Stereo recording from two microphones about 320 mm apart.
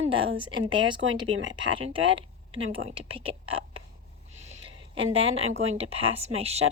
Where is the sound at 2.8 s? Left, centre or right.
Centre.